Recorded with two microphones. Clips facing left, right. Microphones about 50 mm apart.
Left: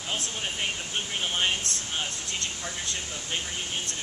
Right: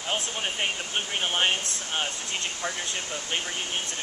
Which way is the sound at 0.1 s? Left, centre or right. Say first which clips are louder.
Right 3 dB; right.